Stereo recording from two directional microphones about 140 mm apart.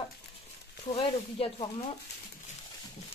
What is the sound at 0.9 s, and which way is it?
Speech, 40° left (ahead or behind).